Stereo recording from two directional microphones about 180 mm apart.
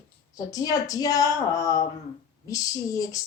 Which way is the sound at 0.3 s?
20° left (ahead or behind).